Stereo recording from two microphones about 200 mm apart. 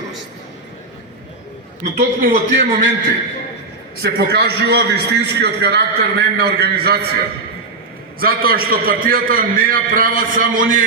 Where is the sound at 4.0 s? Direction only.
55° right (ahead or behind).